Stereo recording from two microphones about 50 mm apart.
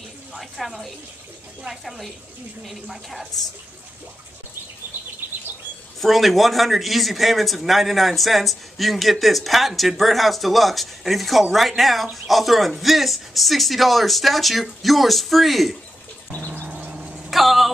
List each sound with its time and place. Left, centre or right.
0.3 s speech: centre
5.9 s speech: centre
16.6 s vehicle: right
17.3 s vehicle: centre